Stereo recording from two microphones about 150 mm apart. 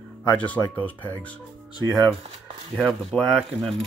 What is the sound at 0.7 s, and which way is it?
Speech, 10° left (ahead or behind).